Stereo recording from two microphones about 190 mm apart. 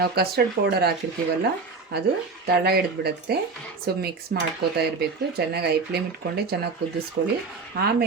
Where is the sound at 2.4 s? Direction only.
55° right (ahead or behind).